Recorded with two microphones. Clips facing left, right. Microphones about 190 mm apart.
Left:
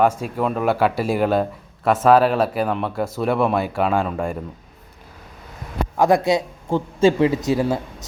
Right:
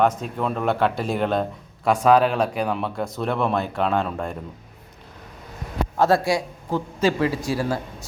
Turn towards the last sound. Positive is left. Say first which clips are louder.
# left 5 dB
turn(degrees=20)  # may be behind; listen again after turning